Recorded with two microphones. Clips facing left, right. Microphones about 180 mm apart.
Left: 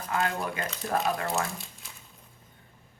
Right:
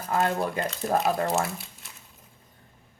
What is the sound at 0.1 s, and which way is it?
Speech, 40° right (ahead or behind).